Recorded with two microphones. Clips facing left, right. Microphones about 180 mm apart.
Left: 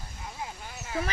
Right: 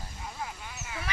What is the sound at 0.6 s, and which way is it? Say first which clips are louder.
Speech: left 7 dB; 40° left (ahead or behind).